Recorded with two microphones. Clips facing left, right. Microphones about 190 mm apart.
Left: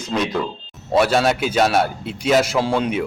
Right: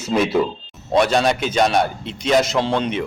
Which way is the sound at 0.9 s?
5° left (ahead or behind).